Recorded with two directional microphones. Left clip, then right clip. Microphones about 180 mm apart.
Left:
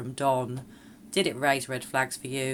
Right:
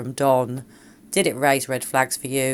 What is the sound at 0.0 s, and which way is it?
Speech, 35° right (ahead or behind).